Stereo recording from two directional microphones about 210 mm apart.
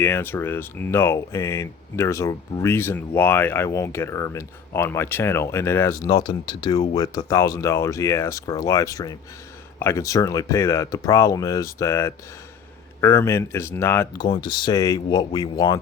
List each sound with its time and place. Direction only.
0.0 s speech: 10° left (ahead or behind)